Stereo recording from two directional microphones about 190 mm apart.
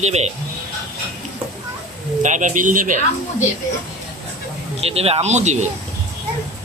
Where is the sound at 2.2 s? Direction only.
40° right (ahead or behind).